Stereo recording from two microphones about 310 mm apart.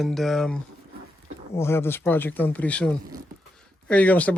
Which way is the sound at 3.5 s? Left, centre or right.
Centre.